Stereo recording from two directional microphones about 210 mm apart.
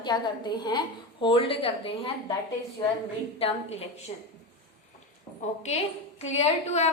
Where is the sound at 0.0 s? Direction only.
20° left (ahead or behind).